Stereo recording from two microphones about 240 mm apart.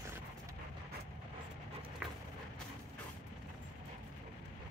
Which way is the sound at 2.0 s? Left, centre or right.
Centre.